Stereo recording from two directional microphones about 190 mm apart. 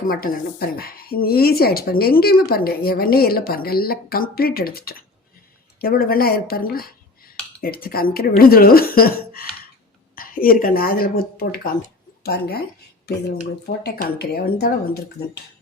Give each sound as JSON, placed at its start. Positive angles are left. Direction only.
{"t": 0.1, "sound": "a woman's voice", "side_deg": 50}